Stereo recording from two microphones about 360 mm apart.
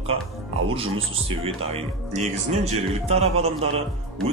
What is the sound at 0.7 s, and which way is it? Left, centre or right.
Speech, centre.